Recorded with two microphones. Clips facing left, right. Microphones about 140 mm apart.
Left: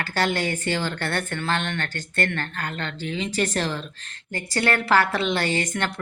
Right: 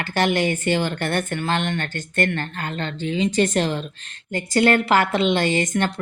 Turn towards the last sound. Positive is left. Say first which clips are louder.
# right 4 dB
turn(degrees=-20)  # may be behind; listen again after turning